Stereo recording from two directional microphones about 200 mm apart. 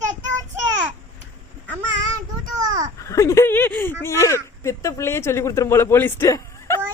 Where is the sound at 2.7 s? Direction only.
20° right (ahead or behind).